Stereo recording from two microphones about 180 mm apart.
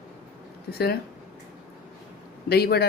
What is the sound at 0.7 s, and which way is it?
Speech, 60° left (ahead or behind).